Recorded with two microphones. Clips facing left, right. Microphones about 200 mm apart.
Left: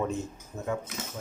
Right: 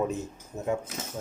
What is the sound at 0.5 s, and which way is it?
Speech, 20° right (ahead or behind).